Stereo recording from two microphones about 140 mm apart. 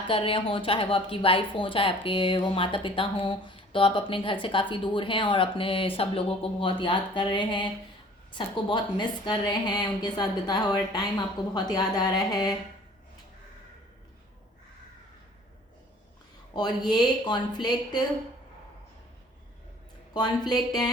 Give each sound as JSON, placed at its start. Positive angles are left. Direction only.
{"t": 0.1, "sound": "a woman's voice", "side_deg": 40}
{"t": 16.6, "sound": "a woman's voice", "side_deg": 30}
{"t": 20.1, "sound": "a woman's voice", "side_deg": 30}